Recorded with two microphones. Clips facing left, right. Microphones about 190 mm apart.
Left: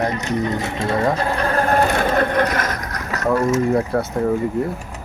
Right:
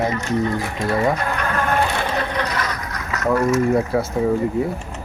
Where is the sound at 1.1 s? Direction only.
35° left (ahead or behind); by 2.7 s 50° left (ahead or behind).